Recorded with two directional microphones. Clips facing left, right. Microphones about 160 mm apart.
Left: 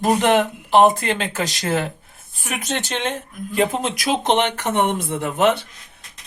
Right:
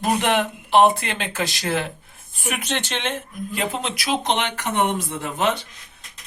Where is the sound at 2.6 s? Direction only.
40° left (ahead or behind); by 5.7 s 60° left (ahead or behind).